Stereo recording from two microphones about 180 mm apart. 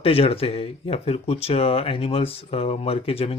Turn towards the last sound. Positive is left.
turn(degrees=35)  # may be behind; listen again after turning